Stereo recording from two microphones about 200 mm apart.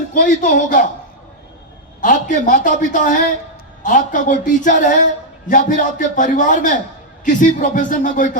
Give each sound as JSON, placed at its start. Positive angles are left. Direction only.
{"t": 0.1, "sound": "a woman's voice", "side_deg": 40}
{"t": 2.0, "sound": "a woman's voice", "side_deg": 40}